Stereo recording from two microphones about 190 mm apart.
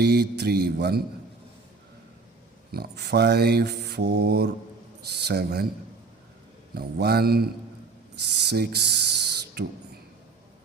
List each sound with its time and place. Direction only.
0.0 s mantra: 60° right (ahead or behind)
2.7 s mantra: 60° right (ahead or behind)
6.7 s mantra: 55° right (ahead or behind)
8.2 s speech: 60° right (ahead or behind)